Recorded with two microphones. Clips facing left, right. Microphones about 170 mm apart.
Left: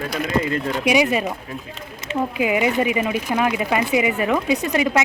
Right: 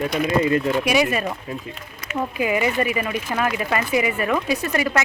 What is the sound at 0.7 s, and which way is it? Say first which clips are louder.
Speech: left 1 dB; 15° left (ahead or behind).